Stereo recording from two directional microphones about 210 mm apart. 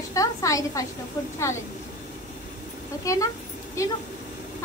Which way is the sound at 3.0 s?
15° left (ahead or behind).